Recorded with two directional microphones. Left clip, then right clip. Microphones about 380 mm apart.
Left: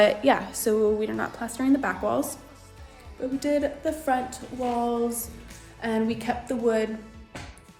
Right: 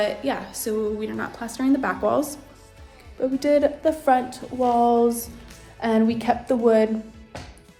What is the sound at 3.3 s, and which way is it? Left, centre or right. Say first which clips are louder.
A woman's voice: right 6 dB; right.